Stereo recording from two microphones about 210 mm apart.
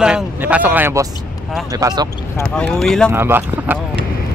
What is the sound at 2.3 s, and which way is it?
Speech, 5° left (ahead or behind).